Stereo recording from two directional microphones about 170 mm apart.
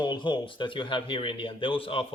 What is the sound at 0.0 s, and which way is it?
Speech, 25° left (ahead or behind).